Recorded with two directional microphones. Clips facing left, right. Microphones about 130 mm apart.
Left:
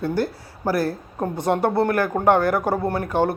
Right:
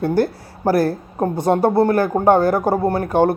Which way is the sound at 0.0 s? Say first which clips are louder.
Right 5 dB; 50° right (ahead or behind).